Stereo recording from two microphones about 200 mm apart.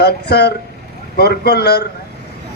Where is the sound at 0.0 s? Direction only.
55° left (ahead or behind).